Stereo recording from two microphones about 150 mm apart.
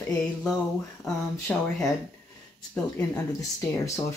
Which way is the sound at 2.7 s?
20° left (ahead or behind).